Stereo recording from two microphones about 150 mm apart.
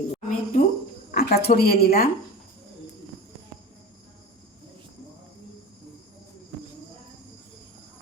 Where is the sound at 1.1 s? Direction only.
90° left.